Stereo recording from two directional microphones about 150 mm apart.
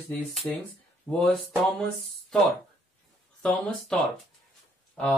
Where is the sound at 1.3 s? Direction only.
Centre (ahead or behind).